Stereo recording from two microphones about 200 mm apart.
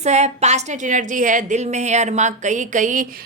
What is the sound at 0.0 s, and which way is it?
A woman's voice, 35° right (ahead or behind).